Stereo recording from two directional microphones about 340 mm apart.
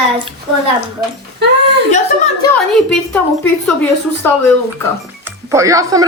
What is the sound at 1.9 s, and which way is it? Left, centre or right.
Speech, centre.